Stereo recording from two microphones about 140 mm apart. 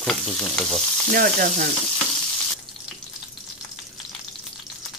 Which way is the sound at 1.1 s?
75° right (ahead or behind).